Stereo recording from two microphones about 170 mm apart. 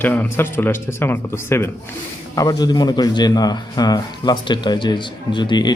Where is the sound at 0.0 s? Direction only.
10° left (ahead or behind).